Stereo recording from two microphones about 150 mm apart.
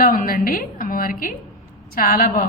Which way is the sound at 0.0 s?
70° left (ahead or behind).